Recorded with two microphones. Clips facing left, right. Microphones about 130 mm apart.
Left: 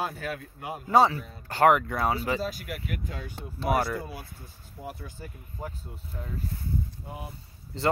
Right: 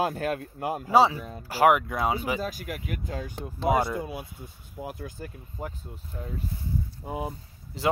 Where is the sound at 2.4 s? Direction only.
50° right (ahead or behind).